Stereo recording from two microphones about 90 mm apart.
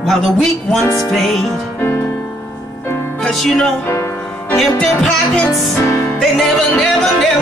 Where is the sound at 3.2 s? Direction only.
5° left (ahead or behind).